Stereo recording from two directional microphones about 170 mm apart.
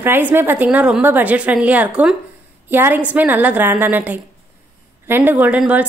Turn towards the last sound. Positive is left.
turn(degrees=-10)  # may be behind; listen again after turning